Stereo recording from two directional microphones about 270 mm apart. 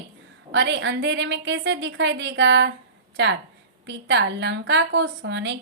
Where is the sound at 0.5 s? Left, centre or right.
Right.